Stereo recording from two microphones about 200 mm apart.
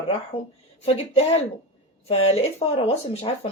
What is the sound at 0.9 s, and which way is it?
Speech, 30° left (ahead or behind).